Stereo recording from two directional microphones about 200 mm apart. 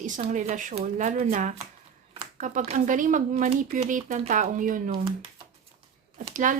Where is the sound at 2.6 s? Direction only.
40° right (ahead or behind).